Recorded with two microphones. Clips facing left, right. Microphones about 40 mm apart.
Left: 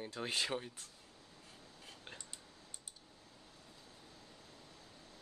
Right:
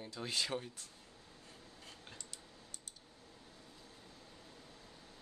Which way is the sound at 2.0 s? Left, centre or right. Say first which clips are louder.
Left 1 dB; left.